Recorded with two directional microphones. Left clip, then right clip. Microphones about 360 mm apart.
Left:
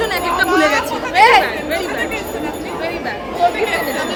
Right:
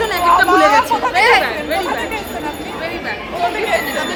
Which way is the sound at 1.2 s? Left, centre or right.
Centre.